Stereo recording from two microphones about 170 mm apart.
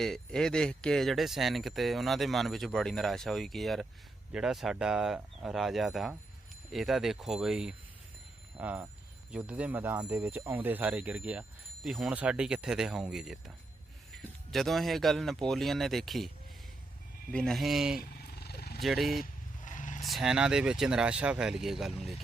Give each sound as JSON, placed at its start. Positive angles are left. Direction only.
{"t": 0.0, "sound": "speech", "side_deg": 5}
{"t": 17.3, "sound": "speech", "side_deg": 0}
{"t": 18.3, "sound": "wild animals", "side_deg": 70}
{"t": 18.8, "sound": "speech", "side_deg": 0}
{"t": 19.2, "sound": "vehicle", "side_deg": 45}
{"t": 20.1, "sound": "speech", "side_deg": 0}